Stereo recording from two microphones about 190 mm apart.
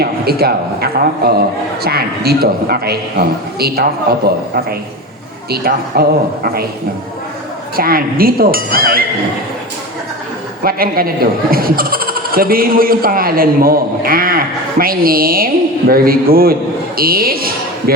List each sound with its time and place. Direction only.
0.0 s a man's voice: 55° right (ahead or behind)
5.5 s a man's voice: 55° right (ahead or behind)
7.8 s speech: 50° right (ahead or behind)
10.6 s speech: 50° right (ahead or behind)